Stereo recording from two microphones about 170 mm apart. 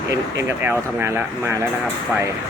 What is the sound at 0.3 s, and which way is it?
Speech, 15° right (ahead or behind).